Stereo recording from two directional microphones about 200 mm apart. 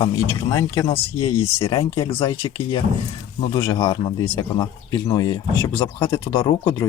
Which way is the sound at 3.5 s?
25° left (ahead or behind).